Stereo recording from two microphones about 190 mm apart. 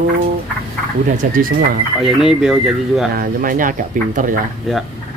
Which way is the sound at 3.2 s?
45° right (ahead or behind).